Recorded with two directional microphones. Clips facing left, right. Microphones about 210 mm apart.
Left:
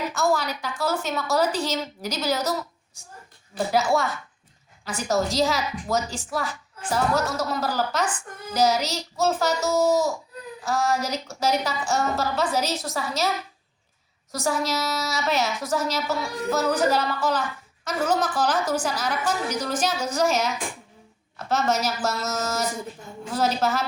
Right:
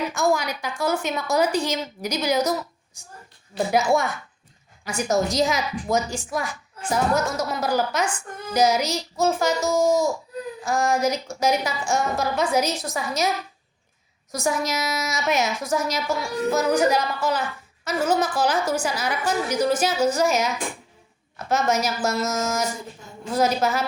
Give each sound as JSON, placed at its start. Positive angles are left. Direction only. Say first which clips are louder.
{"t": 0.1, "sound": "a woman's voice", "louder": "right 1 dB", "side_deg": -15}
{"t": 3.7, "sound": "a woman's voice", "louder": "right 2 dB", "side_deg": -20}
{"t": 14.7, "sound": "a woman's voice", "louder": "even", "side_deg": -15}